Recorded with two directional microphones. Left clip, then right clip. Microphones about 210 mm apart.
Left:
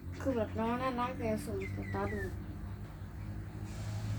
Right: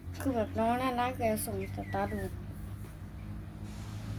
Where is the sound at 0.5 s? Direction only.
60° right (ahead or behind).